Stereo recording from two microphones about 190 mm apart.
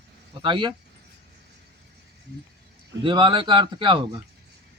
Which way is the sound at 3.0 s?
25° right (ahead or behind).